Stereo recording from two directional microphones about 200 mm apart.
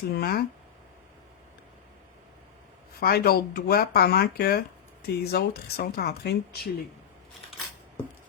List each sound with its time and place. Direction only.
0.1 s speech: 50° left (ahead or behind)
3.0 s speech: 50° left (ahead or behind)